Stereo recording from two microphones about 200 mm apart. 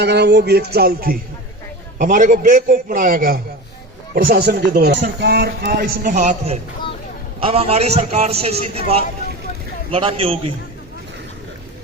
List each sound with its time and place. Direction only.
0.0 s a man's voice: 60° right (ahead or behind); by 10.3 s 25° right (ahead or behind)